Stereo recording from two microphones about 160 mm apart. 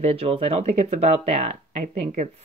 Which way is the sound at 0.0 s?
40° right (ahead or behind).